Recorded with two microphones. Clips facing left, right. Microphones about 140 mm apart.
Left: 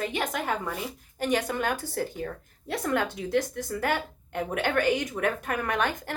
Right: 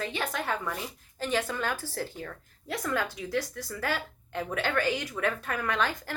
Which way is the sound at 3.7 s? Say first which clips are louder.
Left 4 dB; 55° left (ahead or behind).